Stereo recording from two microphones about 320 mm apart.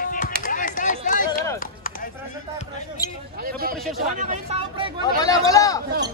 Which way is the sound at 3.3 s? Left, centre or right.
Right.